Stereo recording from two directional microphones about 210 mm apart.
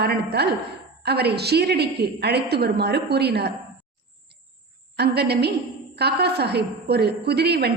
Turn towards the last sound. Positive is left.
turn(degrees=-50)  # may be behind; listen again after turning